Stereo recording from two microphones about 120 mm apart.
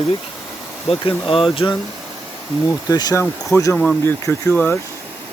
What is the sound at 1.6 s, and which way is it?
Speech, 30° left (ahead or behind).